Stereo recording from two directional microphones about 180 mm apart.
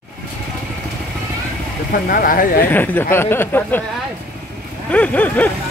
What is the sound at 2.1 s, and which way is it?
Speech, 50° left (ahead or behind).